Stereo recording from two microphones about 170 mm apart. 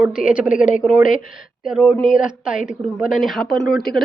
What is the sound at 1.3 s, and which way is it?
A woman's voice, 5° right (ahead or behind).